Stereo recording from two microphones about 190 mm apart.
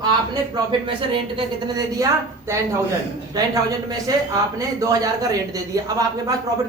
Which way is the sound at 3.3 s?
20° right (ahead or behind).